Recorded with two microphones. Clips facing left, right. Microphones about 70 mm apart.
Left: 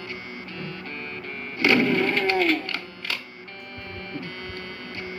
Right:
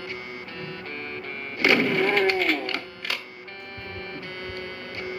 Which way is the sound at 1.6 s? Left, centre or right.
Right.